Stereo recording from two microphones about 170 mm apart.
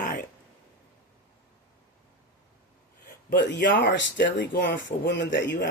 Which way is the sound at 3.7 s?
90° left.